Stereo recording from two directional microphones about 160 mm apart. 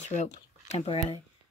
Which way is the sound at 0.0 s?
50° left (ahead or behind).